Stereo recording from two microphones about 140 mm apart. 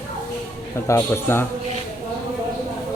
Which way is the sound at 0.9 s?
20° left (ahead or behind).